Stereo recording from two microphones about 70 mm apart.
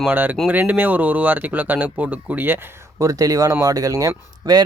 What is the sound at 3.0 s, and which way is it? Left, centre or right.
Speech, right.